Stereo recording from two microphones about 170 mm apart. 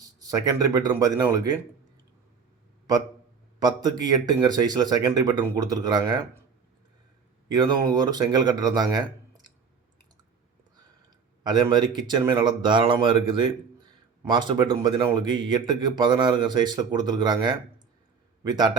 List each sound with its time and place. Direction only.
0.0 s speech: 20° right (ahead or behind)
3.6 s speech: 25° right (ahead or behind)
7.4 s speech: 25° right (ahead or behind)
11.4 s speech: 25° right (ahead or behind)